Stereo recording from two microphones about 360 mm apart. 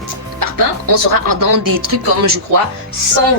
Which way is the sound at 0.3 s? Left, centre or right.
Right.